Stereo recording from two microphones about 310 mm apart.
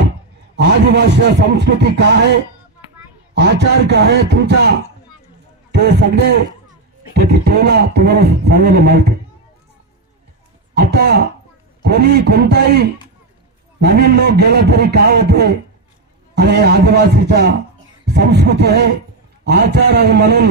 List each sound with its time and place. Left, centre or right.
0.6 s speech: right
10.7 s speech: right